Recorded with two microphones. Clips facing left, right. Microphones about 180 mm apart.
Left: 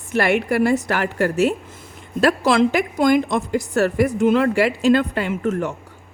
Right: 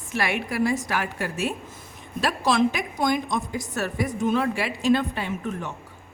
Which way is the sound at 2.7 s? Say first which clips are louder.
Left 8 dB; 75° left (ahead or behind).